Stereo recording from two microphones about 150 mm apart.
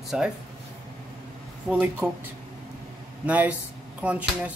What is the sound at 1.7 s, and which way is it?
Speech, 10° right (ahead or behind).